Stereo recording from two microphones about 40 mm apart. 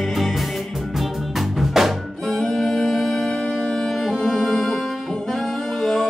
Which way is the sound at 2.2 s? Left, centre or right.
Centre.